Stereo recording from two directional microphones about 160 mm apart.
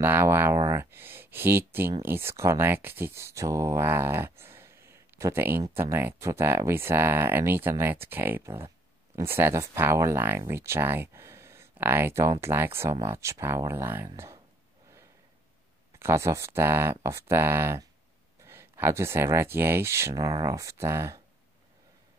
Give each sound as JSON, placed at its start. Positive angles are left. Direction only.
{"t": 0.0, "sound": "speech", "side_deg": -15}
{"t": 16.0, "sound": "speech", "side_deg": -15}